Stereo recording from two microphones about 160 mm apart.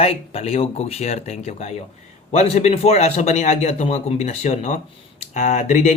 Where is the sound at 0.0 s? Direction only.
40° left (ahead or behind).